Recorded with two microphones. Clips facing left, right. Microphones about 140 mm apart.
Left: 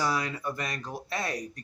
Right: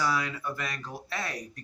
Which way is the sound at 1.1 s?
15° left (ahead or behind).